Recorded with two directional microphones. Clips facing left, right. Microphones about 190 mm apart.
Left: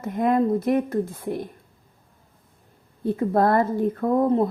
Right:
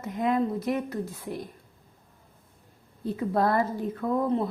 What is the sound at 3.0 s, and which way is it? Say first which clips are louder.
Speech: left 5 dB; 50° left (ahead or behind).